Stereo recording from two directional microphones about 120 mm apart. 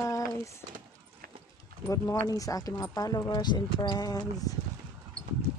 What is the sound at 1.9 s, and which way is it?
Speech, 30° left (ahead or behind).